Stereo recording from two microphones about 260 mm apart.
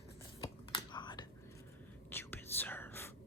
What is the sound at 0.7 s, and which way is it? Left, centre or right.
Whispering, centre.